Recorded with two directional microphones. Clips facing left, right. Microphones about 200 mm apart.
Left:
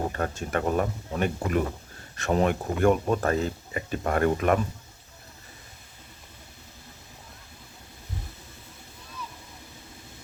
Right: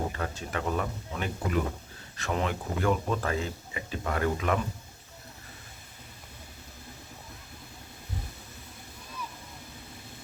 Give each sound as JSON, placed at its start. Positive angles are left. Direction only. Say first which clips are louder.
{"t": 0.1, "sound": "speech", "louder": "left 5 dB", "side_deg": 50}